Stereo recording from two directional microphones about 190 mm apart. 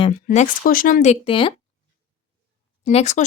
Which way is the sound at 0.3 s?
50° left (ahead or behind).